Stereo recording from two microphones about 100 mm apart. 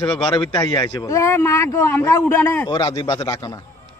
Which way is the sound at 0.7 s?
40° left (ahead or behind).